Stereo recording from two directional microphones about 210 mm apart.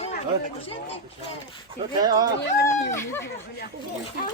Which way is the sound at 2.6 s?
15° left (ahead or behind).